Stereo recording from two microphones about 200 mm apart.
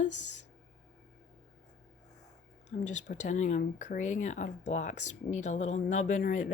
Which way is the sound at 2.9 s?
35° left (ahead or behind).